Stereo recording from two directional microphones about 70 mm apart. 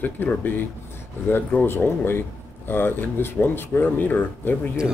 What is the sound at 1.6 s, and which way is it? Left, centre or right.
Speech, left.